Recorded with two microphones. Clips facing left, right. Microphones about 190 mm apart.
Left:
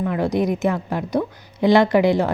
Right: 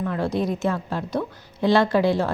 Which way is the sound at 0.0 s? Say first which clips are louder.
Left 4 dB; 15° left (ahead or behind).